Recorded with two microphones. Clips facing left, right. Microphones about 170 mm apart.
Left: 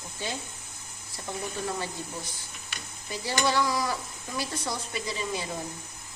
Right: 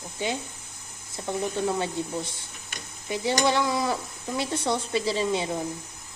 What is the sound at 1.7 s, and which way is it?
Speech, 25° right (ahead or behind).